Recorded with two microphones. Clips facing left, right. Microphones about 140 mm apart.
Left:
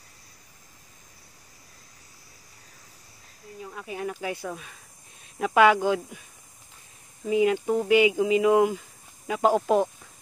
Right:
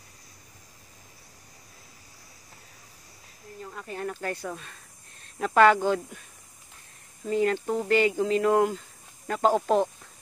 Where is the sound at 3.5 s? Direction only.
5° left (ahead or behind).